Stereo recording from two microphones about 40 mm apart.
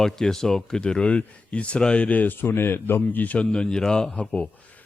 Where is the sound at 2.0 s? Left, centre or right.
Left.